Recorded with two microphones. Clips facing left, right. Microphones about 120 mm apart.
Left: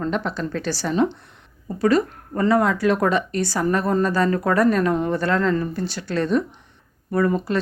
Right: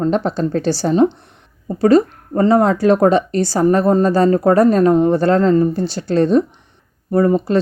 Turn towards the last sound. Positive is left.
turn(degrees=-30)  # may be behind; listen again after turning